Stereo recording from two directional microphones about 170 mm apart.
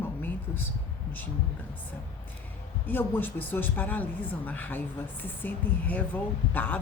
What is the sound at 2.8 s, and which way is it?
Speech, 10° left (ahead or behind).